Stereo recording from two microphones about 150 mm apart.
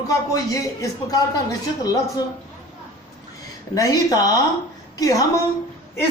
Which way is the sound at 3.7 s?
25° left (ahead or behind).